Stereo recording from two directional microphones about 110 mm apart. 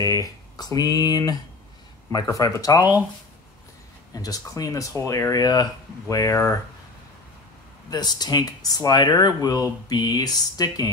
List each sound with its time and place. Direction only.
0.0 s speech: 30° left (ahead or behind)
4.1 s speech: 35° left (ahead or behind)
7.9 s speech: 40° left (ahead or behind)